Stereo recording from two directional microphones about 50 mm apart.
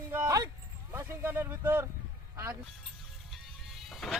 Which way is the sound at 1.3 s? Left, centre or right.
Right.